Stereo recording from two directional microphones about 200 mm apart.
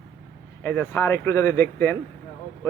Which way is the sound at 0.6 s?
10° left (ahead or behind).